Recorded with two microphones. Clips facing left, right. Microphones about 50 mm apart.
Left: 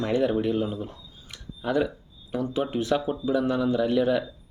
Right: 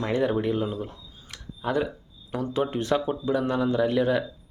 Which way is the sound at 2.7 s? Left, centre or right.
Right.